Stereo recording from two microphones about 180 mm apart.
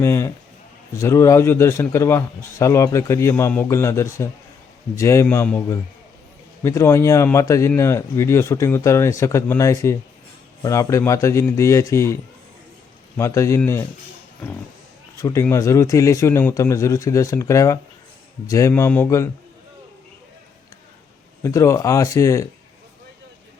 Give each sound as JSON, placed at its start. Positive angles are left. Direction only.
{"t": 0.0, "sound": "a man's voice", "side_deg": 15}
{"t": 15.2, "sound": "a man's voice", "side_deg": 15}
{"t": 21.4, "sound": "a man's voice", "side_deg": 15}